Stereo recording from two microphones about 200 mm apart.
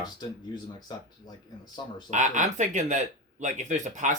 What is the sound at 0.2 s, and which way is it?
Speech, 20° left (ahead or behind).